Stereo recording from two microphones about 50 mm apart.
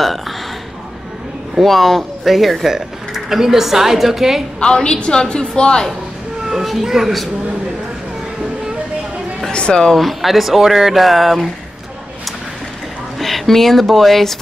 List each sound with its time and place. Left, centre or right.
1.6 s speech: centre
4.6 s a woman's voice: centre
6.5 s speech: centre
9.5 s speech: centre
9.9 s speech: centre
13.2 s speech: centre